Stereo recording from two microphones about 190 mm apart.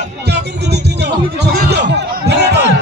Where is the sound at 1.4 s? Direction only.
65° right (ahead or behind).